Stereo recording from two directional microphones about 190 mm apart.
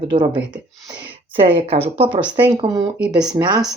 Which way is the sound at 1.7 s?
30° right (ahead or behind).